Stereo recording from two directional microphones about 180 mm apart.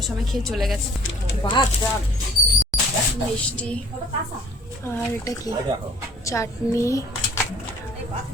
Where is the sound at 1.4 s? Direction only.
25° left (ahead or behind).